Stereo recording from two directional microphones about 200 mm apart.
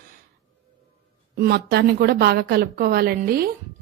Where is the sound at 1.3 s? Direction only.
50° right (ahead or behind).